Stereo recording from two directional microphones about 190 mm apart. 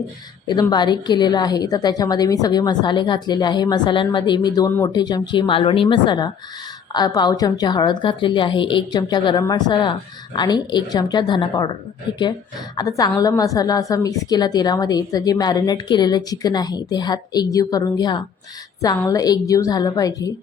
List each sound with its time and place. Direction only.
0.4 s a woman's voice: 20° left (ahead or behind)